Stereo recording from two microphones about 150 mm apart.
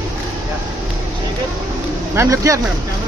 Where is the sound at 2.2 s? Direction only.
20° right (ahead or behind).